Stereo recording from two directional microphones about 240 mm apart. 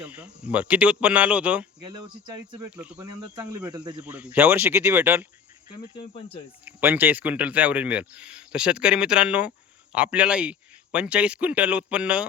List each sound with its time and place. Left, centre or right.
0.0 s speech: centre
1.8 s speech: centre
6.1 s speech: left
6.7 s speech: centre